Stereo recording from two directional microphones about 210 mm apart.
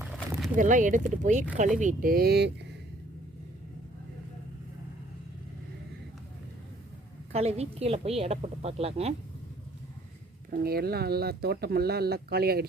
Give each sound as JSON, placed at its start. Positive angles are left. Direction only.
{"t": 0.5, "sound": "speech", "side_deg": -35}
{"t": 7.3, "sound": "a woman's voice", "side_deg": -30}
{"t": 10.6, "sound": "speech", "side_deg": -45}